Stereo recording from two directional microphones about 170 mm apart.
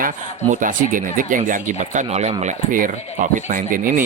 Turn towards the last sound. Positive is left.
turn(degrees=-55)  # may be behind; listen again after turning